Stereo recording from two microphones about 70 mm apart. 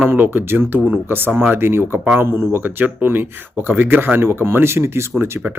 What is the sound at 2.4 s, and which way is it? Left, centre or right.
Speech, right.